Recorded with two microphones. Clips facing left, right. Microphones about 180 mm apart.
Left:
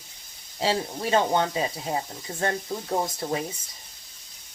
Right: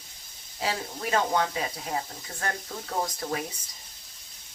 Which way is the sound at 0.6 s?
30° left (ahead or behind).